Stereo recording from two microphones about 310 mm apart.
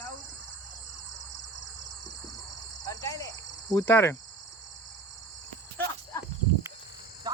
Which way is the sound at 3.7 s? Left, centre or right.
Centre.